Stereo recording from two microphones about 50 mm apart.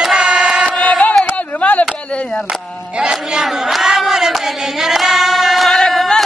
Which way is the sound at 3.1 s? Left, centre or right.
Centre.